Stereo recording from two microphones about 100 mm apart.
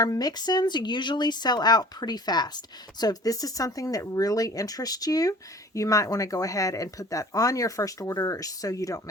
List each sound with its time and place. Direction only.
0.0 s speech: 40° left (ahead or behind)